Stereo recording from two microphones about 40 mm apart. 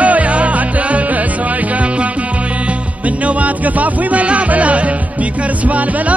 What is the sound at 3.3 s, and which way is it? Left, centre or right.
Music, right.